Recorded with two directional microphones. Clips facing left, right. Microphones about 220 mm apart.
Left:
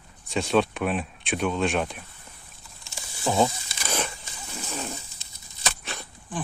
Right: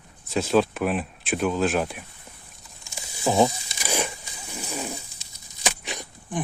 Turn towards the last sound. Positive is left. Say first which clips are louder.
# right 3 dB
turn(degrees=-20)  # may be behind; listen again after turning